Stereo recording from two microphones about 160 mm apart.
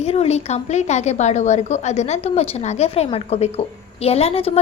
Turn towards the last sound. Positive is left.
turn(degrees=40)  # may be behind; listen again after turning